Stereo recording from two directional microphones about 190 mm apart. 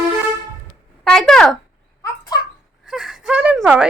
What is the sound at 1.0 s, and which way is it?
Speech, 5° left (ahead or behind).